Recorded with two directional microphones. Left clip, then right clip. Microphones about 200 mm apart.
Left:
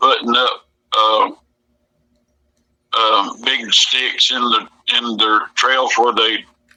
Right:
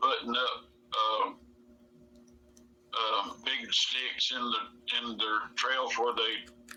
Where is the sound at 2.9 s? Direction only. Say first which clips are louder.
Left 17 dB; 50° left (ahead or behind).